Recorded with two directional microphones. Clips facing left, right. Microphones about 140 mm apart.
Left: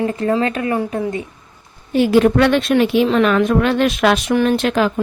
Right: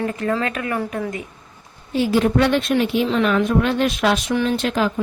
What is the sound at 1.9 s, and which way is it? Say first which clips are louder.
A woman's voice: left 5 dB; 65° left (ahead or behind).